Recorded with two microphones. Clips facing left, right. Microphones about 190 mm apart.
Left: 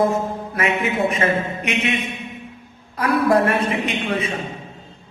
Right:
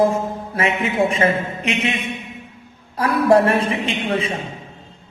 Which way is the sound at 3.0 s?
30° right (ahead or behind).